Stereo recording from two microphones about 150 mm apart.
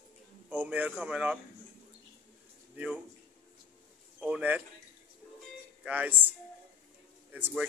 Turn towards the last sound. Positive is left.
turn(degrees=-10)  # may be behind; listen again after turning